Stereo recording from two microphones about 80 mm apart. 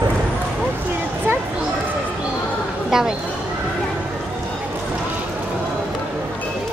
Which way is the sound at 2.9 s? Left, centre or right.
Centre.